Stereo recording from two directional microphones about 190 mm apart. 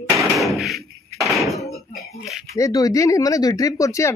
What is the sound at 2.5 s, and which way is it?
Speech, 15° left (ahead or behind).